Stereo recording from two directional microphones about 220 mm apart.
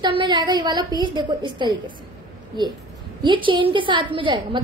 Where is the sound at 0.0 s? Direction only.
20° right (ahead or behind).